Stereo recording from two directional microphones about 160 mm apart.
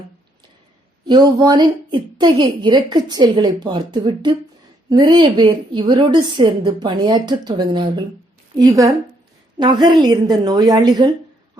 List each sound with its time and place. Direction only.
1.0 s a woman's voice: 25° right (ahead or behind)